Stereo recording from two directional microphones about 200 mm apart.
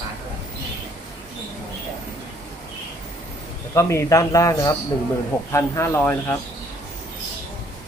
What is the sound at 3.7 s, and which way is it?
Speech, 15° left (ahead or behind).